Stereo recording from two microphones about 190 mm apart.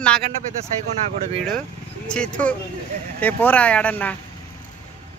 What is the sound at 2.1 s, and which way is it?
Speech, 5° left (ahead or behind).